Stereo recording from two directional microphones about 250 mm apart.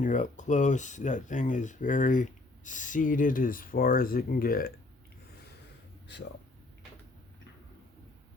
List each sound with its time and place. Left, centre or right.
0.0 s speech: left